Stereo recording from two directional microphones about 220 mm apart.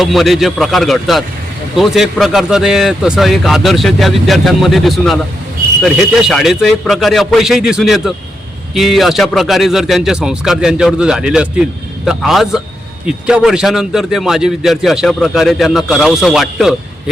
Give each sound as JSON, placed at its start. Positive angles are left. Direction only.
{"t": 0.0, "sound": "a man's voice", "side_deg": 0}